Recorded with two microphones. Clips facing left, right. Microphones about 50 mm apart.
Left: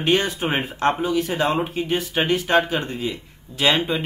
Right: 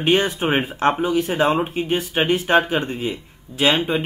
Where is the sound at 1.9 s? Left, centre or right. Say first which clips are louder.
Right 2 dB; centre.